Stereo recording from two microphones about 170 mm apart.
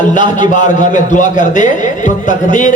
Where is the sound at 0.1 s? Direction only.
50° left (ahead or behind).